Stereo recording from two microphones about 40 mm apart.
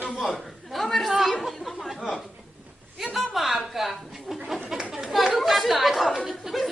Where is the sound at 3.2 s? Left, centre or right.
Centre.